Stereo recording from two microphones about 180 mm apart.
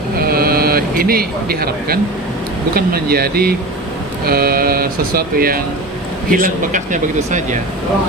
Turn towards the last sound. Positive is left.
turn(degrees=-45)  # may be behind; listen again after turning